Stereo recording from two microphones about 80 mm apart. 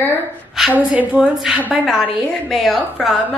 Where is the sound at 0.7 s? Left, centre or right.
Centre.